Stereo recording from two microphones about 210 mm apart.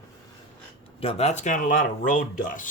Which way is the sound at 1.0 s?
30° left (ahead or behind).